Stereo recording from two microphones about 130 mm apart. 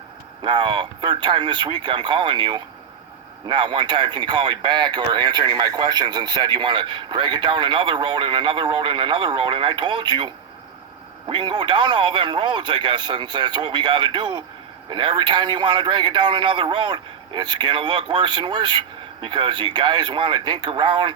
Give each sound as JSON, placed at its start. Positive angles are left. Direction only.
{"t": 0.4, "sound": "speech", "side_deg": -35}